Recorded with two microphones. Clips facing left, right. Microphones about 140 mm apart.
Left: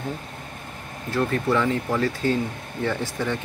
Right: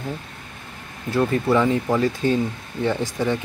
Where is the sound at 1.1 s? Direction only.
15° right (ahead or behind).